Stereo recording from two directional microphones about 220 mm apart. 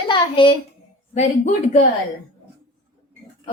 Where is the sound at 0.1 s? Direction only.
20° left (ahead or behind).